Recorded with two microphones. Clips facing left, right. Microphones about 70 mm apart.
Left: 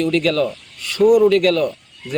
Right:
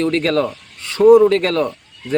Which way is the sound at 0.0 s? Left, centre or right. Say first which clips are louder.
Even; right.